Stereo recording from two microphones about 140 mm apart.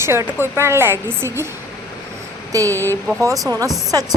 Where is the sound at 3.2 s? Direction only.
20° right (ahead or behind).